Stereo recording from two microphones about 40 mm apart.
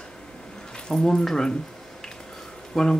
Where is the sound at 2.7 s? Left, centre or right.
Centre.